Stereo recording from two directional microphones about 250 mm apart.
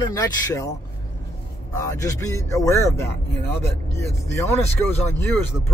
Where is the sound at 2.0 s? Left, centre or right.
Centre.